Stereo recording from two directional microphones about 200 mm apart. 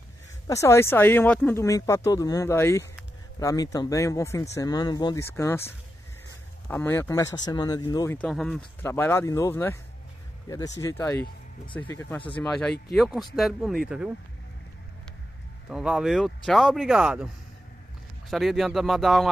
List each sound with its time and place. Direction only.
0.5 s speech: 15° left (ahead or behind)
8.2 s speech: centre (ahead or behind)
12.4 s speech: 5° left (ahead or behind)
15.7 s speech: 5° right (ahead or behind)
18.3 s speech: centre (ahead or behind)